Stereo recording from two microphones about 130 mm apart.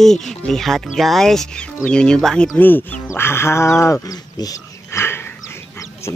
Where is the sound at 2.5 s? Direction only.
15° left (ahead or behind).